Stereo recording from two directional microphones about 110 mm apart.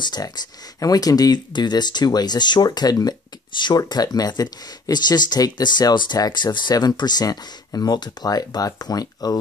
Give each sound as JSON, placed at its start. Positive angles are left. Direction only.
{"t": 0.0, "sound": "speech", "side_deg": 40}